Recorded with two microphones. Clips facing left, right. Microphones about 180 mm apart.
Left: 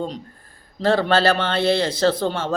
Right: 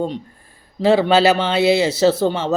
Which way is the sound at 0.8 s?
10° right (ahead or behind).